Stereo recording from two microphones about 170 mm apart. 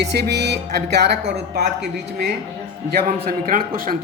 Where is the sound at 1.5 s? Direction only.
80° right.